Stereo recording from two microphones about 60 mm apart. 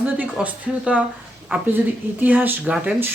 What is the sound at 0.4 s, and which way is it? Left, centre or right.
Speech, right.